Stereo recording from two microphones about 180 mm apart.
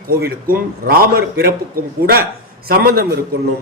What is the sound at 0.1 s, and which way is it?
A man's voice, 55° right (ahead or behind).